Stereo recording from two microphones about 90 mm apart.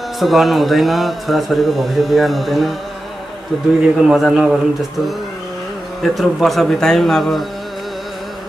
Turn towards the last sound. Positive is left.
turn(degrees=0)  # may be behind; listen again after turning